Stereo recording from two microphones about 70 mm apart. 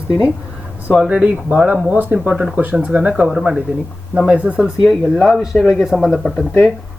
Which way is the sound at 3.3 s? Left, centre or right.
Centre.